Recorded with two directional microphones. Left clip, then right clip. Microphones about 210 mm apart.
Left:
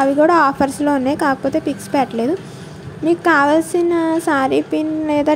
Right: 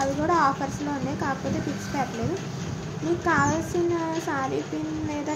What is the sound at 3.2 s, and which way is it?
A woman's voice, 45° left (ahead or behind).